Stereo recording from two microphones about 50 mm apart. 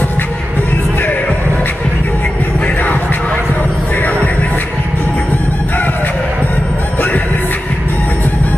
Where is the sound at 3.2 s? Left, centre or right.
Left.